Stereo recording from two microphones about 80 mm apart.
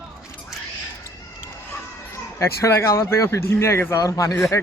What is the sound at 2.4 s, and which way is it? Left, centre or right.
Speech, left.